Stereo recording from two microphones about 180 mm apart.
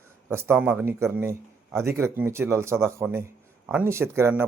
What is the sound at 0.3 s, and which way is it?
A man's voice, 15° right (ahead or behind).